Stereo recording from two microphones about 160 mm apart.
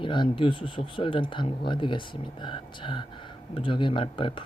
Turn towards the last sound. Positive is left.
turn(degrees=30)  # may be behind; listen again after turning